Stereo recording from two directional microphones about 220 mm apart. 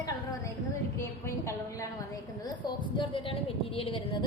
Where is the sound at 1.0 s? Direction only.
10° left (ahead or behind).